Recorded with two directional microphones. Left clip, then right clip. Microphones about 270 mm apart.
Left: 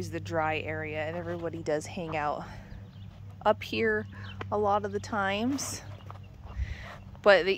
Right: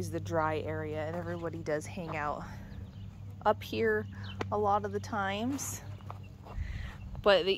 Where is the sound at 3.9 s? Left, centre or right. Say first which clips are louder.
Left 2 dB; centre.